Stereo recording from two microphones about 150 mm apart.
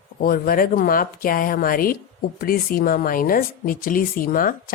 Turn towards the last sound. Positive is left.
turn(degrees=70)  # may be behind; listen again after turning